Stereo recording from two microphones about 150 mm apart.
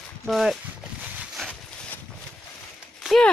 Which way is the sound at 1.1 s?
Centre (ahead or behind).